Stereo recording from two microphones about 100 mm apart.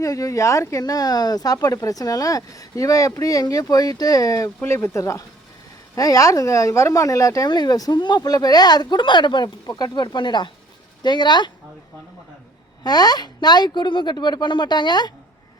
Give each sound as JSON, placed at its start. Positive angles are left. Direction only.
{"t": 0.0, "sound": "a woman's voice", "side_deg": 35}
{"t": 12.8, "sound": "a woman's voice", "side_deg": 40}